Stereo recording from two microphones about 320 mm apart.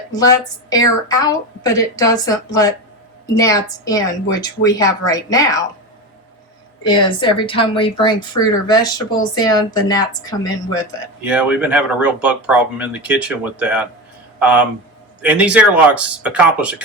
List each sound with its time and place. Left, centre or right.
0.2 s a woman's voice: centre
6.8 s a woman's voice: centre
11.2 s speech: centre